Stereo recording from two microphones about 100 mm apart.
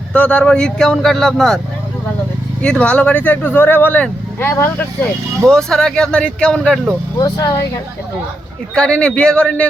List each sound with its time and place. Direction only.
0.1 s speech: 15° left (ahead or behind)
2.6 s speech: 10° left (ahead or behind)
5.5 s speech: 5° left (ahead or behind)
7.2 s speech: 40° left (ahead or behind)
8.7 s speech: 10° left (ahead or behind)